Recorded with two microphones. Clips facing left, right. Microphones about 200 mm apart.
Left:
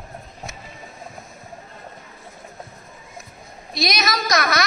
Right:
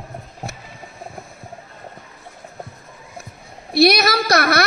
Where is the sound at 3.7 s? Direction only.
60° right (ahead or behind).